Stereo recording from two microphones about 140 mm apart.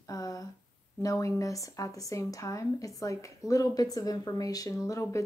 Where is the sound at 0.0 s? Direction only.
25° left (ahead or behind).